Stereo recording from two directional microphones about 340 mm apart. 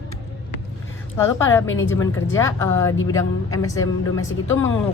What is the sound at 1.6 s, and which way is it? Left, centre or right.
Speech, left.